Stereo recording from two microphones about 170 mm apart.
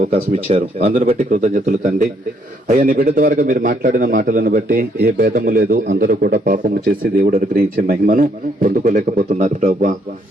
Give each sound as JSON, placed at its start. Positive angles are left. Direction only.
{"t": 0.1, "sound": "speech", "side_deg": -40}
{"t": 2.7, "sound": "a man's voice", "side_deg": -60}